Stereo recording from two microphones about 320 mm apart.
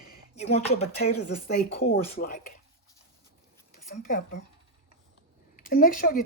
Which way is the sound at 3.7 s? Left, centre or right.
Left.